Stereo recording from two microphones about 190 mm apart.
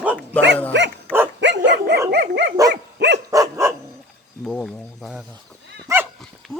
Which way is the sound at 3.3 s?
15° right (ahead or behind).